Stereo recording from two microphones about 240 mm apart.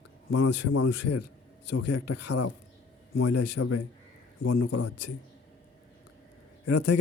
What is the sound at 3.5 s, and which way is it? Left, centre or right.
Speech, left.